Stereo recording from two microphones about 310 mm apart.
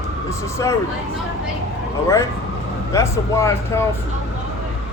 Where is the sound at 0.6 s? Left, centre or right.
Centre.